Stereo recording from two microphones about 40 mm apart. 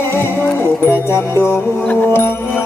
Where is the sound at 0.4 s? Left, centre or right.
Left.